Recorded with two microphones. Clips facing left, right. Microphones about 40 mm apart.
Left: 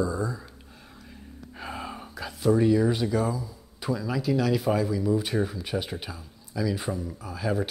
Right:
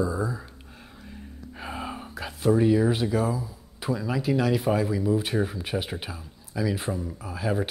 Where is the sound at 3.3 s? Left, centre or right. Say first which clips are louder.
Right 2 dB; right.